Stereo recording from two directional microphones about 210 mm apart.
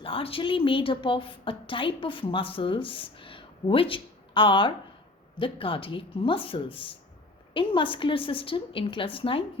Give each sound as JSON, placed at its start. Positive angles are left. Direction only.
{"t": 0.0, "sound": "a woman's voice", "side_deg": 25}